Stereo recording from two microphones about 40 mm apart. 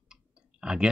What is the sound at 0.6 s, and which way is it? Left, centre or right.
Speech, right.